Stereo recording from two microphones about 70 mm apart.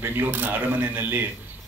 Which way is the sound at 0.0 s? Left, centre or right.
Right.